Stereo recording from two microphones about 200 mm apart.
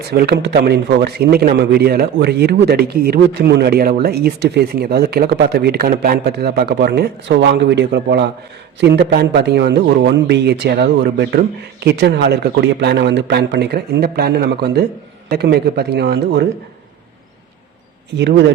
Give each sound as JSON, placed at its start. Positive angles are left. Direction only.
{"t": 0.1, "sound": "a man's voice", "side_deg": -55}
{"t": 18.2, "sound": "a man's voice", "side_deg": -60}